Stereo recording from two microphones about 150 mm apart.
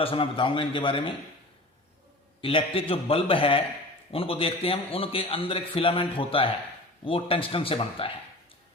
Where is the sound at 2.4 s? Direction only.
35° left (ahead or behind).